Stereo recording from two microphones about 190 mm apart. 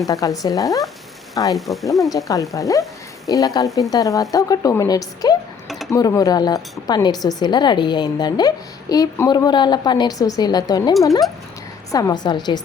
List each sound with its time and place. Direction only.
0.1 s speech: 20° left (ahead or behind)
1.5 s speech: centre (ahead or behind)
2.1 s speech: 15° left (ahead or behind)